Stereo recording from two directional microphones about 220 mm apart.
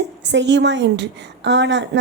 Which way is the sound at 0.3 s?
55° right (ahead or behind).